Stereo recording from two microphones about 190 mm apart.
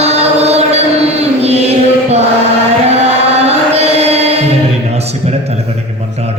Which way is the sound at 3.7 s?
35° right (ahead or behind).